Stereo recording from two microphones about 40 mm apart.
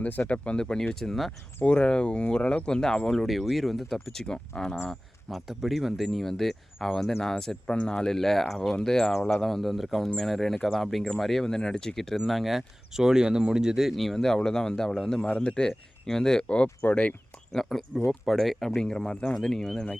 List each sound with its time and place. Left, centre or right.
0.0 s speech: left
0.4 s speech: left
0.9 s speech: centre
1.6 s speech: left
3.2 s speech: centre
5.5 s speech: centre
7.2 s speech: centre
9.6 s speech: centre
10.2 s speech: centre
11.4 s speech: centre
12.1 s speech: centre
13.9 s speech: centre; by 17.2 s left
17.5 s speech: centre
18.8 s speech: centre